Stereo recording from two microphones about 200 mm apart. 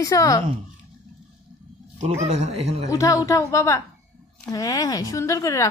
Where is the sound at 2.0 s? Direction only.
35° right (ahead or behind).